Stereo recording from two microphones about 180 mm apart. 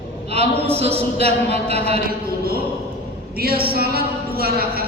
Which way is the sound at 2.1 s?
55° right (ahead or behind).